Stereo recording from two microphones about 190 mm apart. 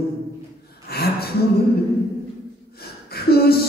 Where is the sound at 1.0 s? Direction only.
55° left (ahead or behind).